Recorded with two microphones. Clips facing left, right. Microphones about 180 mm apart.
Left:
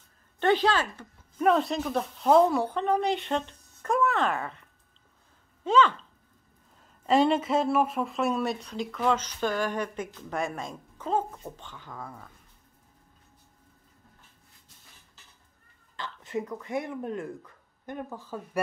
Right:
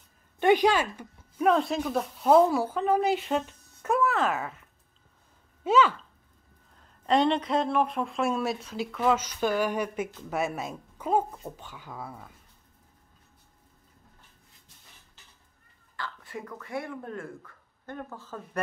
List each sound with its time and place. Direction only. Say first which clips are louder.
0.4 s a woman's voice: right 2 dB; 10° right (ahead or behind)
1.4 s speech: even; centre (ahead or behind)
7.1 s speech: left 1 dB; 5° left (ahead or behind)
16.0 s speech: left 5 dB; 20° left (ahead or behind)